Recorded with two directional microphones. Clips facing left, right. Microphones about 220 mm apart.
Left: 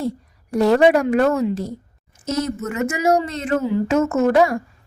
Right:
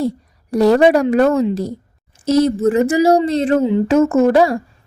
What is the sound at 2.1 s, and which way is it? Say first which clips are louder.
A woman's voice: right 9 dB; 35° right (ahead or behind).